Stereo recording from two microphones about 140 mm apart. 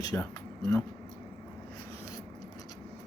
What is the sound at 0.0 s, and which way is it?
Speech, 25° left (ahead or behind).